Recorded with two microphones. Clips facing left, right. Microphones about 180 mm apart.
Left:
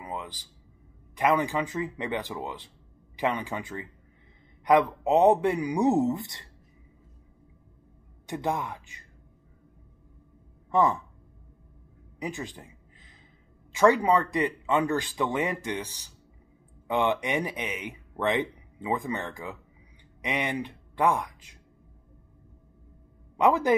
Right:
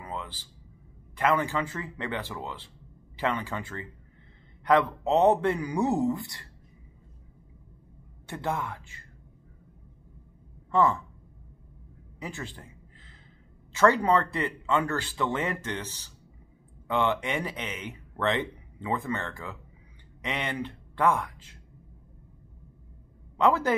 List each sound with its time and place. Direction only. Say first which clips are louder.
0.0 s a sound: left 1 dB; 15° left (ahead or behind)
1.1 s speech: left 1 dB; 15° left (ahead or behind)
8.3 s speech: left 2 dB; 15° left (ahead or behind)
10.7 s speech: even; 15° left (ahead or behind)
12.2 s a sound: left 3 dB; 15° left (ahead or behind)
13.7 s speech: left 1 dB; 15° left (ahead or behind)
23.3 s a man's voice: left 1 dB; 15° left (ahead or behind)